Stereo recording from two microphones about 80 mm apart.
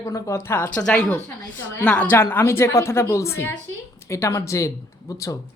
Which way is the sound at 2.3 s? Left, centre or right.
Left.